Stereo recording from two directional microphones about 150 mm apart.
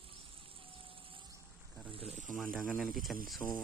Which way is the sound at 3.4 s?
15° left (ahead or behind).